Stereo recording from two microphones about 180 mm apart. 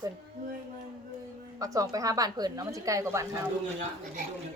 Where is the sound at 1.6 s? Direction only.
20° right (ahead or behind).